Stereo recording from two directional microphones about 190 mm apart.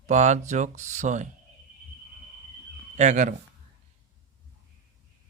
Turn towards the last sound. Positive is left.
turn(degrees=-40)  # may be behind; listen again after turning